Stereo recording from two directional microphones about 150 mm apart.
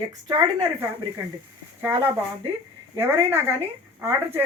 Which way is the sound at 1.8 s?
10° right (ahead or behind).